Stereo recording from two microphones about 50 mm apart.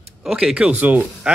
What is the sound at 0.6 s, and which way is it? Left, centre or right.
Speech, right.